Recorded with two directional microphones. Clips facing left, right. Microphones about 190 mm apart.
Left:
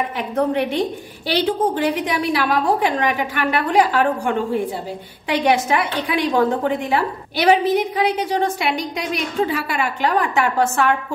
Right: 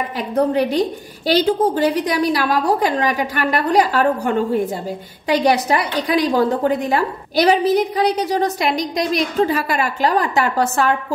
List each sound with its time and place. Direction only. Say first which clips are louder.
0.5 s a woman's voice: right 3 dB; 40° right (ahead or behind)